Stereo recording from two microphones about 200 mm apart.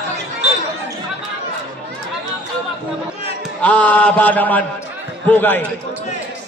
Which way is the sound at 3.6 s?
10° left (ahead or behind).